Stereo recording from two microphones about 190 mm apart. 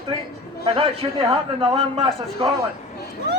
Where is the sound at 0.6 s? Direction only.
25° right (ahead or behind).